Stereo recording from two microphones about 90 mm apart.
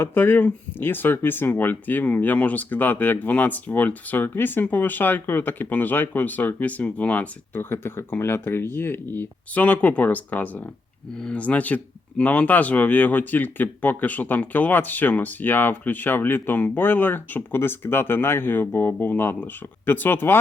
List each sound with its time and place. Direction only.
0.0 s speech: 25° left (ahead or behind)